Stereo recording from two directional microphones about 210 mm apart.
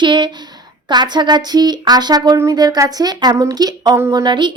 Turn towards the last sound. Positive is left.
turn(degrees=-20)  # may be behind; listen again after turning